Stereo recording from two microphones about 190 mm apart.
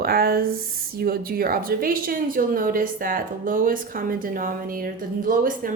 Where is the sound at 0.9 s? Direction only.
50° right (ahead or behind).